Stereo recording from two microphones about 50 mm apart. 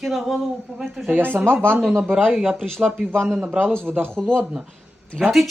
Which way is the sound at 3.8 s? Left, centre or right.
Right.